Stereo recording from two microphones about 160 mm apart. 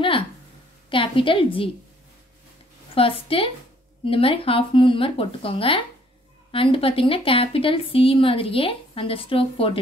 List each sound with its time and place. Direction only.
0.8 s speech: 30° left (ahead or behind)
2.9 s a woman's voice: 35° left (ahead or behind)